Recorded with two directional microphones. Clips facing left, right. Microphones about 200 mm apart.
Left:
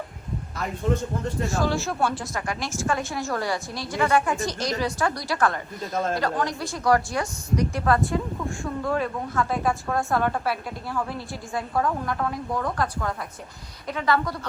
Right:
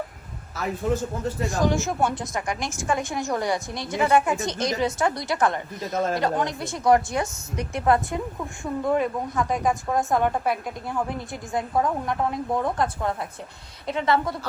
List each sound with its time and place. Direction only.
0.5 s a man's voice: 5° right (ahead or behind)
1.5 s a woman's voice: 15° right (ahead or behind)
5.8 s a man's voice: centre (ahead or behind)
6.1 s a woman's voice: 20° right (ahead or behind)